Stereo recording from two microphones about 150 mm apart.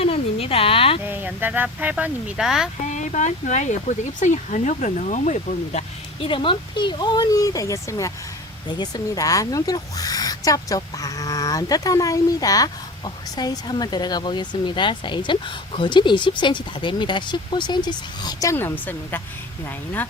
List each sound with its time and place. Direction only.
0.0 s a sound: 40° left (ahead or behind)
1.0 s speech: 10° right (ahead or behind)
2.8 s speech: 55° left (ahead or behind)
6.2 s speech: 35° left (ahead or behind); by 19.2 s 15° left (ahead or behind)